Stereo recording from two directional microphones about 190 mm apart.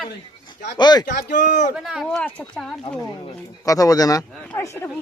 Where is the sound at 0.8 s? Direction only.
20° left (ahead or behind).